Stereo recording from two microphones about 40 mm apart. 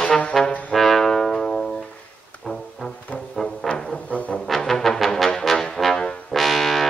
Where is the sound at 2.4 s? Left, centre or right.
Centre.